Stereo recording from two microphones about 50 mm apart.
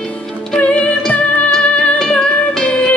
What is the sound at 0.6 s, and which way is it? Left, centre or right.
Music, left.